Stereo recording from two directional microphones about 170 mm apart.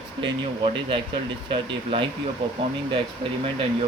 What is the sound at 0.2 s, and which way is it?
Speech, 30° right (ahead or behind).